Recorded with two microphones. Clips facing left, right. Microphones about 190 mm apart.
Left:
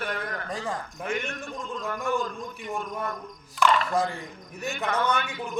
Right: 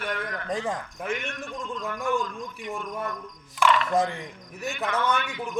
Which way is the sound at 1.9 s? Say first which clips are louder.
Even; 40° left (ahead or behind).